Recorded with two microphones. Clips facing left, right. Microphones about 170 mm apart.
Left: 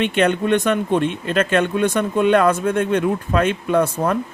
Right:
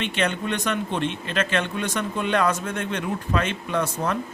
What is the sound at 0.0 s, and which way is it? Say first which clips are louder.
Speech: left 8 dB; 55° left (ahead or behind).